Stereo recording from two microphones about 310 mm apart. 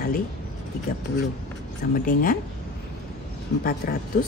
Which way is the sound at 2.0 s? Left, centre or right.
Left.